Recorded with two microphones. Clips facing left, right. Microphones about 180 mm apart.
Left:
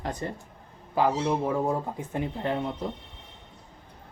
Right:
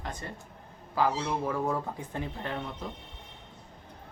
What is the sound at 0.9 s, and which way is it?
Speech, 20° left (ahead or behind).